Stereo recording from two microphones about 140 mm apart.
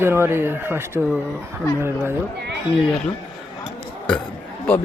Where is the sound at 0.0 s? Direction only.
15° right (ahead or behind).